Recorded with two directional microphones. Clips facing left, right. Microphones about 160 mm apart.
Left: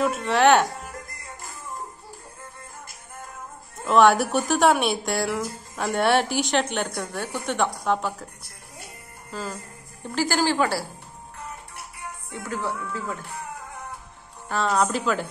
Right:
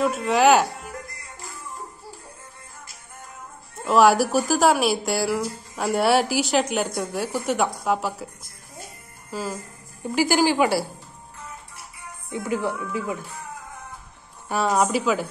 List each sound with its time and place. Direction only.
0.0 s a woman's voice: centre (ahead or behind)
3.8 s a woman's voice: 5° right (ahead or behind)
9.3 s a woman's voice: 10° right (ahead or behind)
12.3 s a woman's voice: 15° right (ahead or behind)
14.5 s a woman's voice: 10° right (ahead or behind)